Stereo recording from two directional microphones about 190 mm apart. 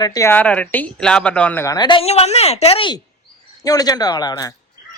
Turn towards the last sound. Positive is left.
turn(degrees=20)  # may be behind; listen again after turning